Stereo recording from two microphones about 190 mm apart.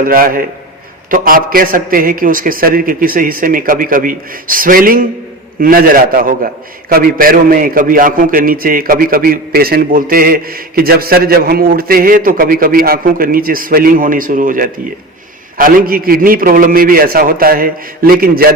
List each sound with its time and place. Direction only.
0.0 s a man's voice: 50° right (ahead or behind)